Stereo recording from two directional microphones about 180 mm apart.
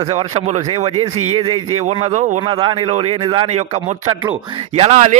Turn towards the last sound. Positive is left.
turn(degrees=-40)  # may be behind; listen again after turning